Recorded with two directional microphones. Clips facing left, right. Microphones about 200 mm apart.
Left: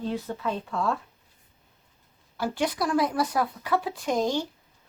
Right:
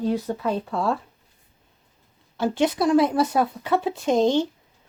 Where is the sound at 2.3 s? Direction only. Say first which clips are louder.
Right 6 dB; 25° right (ahead or behind).